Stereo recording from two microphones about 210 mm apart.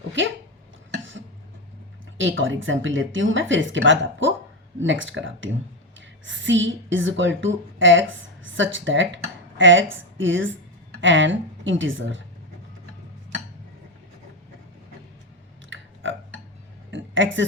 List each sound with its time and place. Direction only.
0.2 s speech: 65° right (ahead or behind)
2.1 s speech: 65° right (ahead or behind)
15.7 s burping: 65° right (ahead or behind)
16.9 s a sound: 60° right (ahead or behind)